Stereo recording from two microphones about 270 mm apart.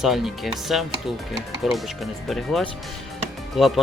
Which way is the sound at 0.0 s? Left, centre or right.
Centre.